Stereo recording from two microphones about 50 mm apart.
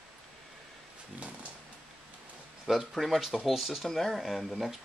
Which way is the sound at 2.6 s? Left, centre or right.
Centre.